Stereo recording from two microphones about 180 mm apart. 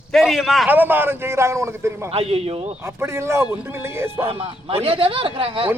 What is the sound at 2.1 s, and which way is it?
Speech, 35° right (ahead or behind).